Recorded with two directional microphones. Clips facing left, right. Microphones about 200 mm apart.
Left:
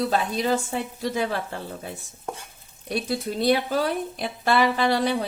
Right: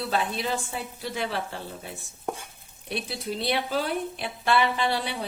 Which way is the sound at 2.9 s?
45° left (ahead or behind).